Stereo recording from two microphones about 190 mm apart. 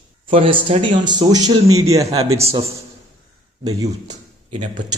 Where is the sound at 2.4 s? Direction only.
30° right (ahead or behind).